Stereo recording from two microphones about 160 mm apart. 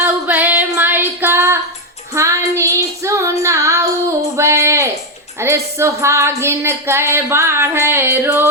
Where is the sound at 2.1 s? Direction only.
20° right (ahead or behind).